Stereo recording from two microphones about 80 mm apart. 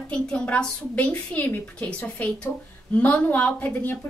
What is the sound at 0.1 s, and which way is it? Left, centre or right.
A woman's voice, centre.